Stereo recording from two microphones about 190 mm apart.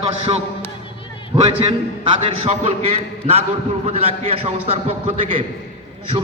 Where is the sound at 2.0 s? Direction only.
25° right (ahead or behind).